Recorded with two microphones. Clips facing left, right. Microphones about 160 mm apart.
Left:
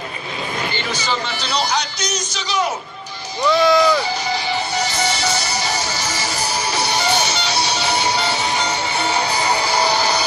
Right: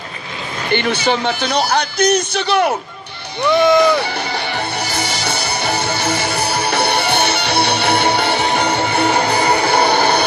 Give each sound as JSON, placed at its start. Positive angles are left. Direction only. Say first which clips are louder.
{"t": 0.7, "sound": "speech", "louder": "right 7 dB", "side_deg": -60}
{"t": 3.5, "sound": "speech", "louder": "right 3 dB", "side_deg": -20}
{"t": 3.9, "sound": "music", "louder": "right 1 dB", "side_deg": -60}